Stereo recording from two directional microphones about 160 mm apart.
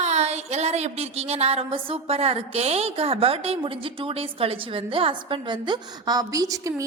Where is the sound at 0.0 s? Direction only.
45° right (ahead or behind).